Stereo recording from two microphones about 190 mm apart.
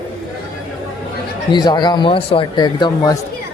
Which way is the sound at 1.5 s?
25° left (ahead or behind).